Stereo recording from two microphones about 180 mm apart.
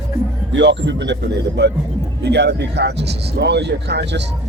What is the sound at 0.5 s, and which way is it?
Speech, 75° right (ahead or behind).